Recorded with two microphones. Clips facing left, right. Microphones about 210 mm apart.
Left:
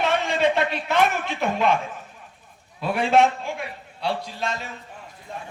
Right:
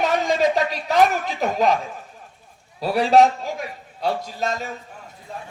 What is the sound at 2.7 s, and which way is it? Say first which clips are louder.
A man's voice: right 3 dB; 35° right (ahead or behind).